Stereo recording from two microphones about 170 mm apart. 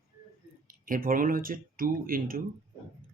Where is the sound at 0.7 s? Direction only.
55° right (ahead or behind).